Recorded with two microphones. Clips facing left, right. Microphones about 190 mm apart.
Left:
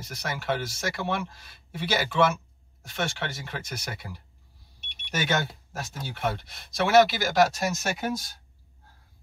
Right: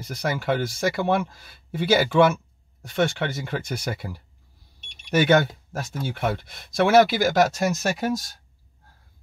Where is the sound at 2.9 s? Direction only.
55° right (ahead or behind).